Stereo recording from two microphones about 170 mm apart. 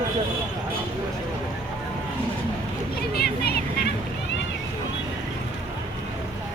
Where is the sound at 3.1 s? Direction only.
65° left (ahead or behind).